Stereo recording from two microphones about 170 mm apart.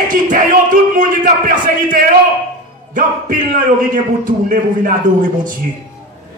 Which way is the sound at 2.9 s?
50° right (ahead or behind).